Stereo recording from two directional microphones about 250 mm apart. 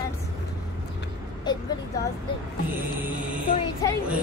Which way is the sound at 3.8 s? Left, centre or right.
Centre.